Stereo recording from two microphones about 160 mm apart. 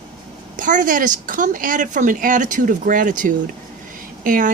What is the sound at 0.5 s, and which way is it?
Speech, 55° right (ahead or behind).